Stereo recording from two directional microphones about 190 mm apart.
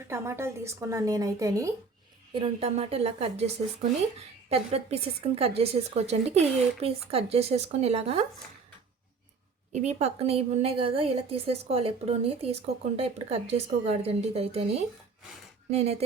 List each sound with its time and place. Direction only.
0.1 s speech: 15° right (ahead or behind)
2.4 s a woman's voice: 30° right (ahead or behind)
9.7 s a woman's voice: 35° right (ahead or behind)